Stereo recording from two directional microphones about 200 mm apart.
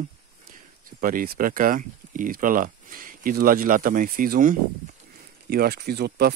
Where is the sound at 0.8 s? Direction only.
45° right (ahead or behind).